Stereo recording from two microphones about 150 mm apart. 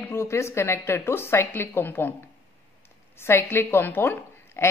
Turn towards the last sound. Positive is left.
turn(degrees=15)  # may be behind; listen again after turning